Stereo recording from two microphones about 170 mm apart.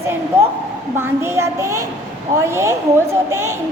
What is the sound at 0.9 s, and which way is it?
A child's voice, 15° right (ahead or behind).